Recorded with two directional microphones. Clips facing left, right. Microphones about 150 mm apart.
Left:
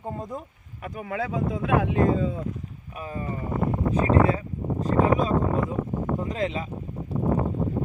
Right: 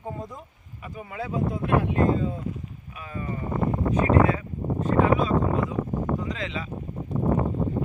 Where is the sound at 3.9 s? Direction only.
35° left (ahead or behind).